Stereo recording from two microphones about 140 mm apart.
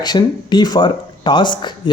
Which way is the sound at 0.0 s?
30° left (ahead or behind).